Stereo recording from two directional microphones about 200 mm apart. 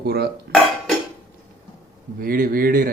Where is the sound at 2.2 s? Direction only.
45° right (ahead or behind).